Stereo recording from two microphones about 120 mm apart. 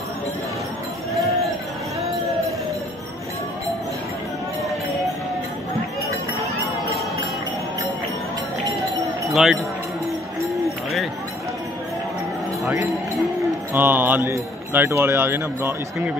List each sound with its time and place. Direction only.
9.3 s speech: 5° right (ahead or behind)
13.7 s a man's voice: 15° right (ahead or behind)